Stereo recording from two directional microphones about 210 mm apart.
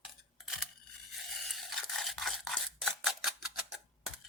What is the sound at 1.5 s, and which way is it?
Scissors, centre (ahead or behind).